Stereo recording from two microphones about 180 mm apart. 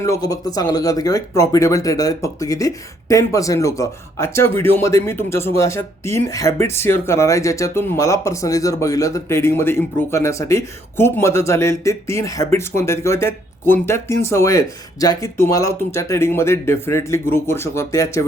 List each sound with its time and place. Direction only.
0.0 s speech: 20° left (ahead or behind)